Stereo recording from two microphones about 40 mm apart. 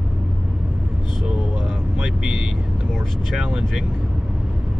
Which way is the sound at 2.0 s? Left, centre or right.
Centre.